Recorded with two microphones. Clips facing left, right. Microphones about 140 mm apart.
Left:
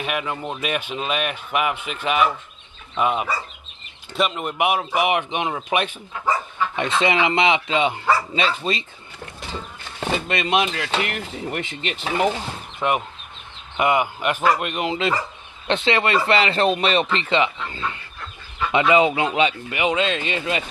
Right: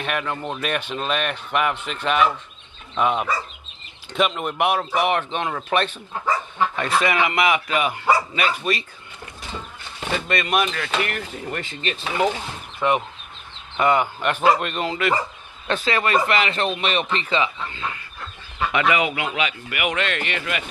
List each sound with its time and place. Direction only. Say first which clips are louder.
0.0 s speech: even; 5° left (ahead or behind)
6.8 s speech: left 2 dB; 20° left (ahead or behind)
10.1 s speech: left 1 dB; 20° left (ahead or behind)